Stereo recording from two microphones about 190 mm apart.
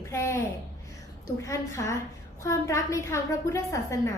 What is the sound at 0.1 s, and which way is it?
A woman's voice, 15° left (ahead or behind).